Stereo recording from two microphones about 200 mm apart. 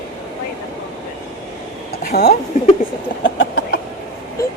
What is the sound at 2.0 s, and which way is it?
Speech, 55° left (ahead or behind).